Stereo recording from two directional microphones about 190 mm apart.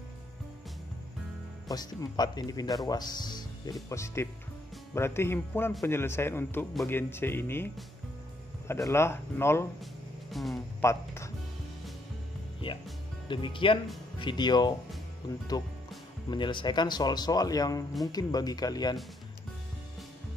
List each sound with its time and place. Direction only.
1.7 s speech: 20° left (ahead or behind)
10.3 s speech: centre (ahead or behind)
10.8 s speech: 15° left (ahead or behind)
13.3 s speech: 25° left (ahead or behind)
16.3 s speech: 25° left (ahead or behind)